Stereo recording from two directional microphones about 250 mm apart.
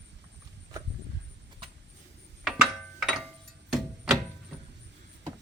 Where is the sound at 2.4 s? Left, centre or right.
Centre.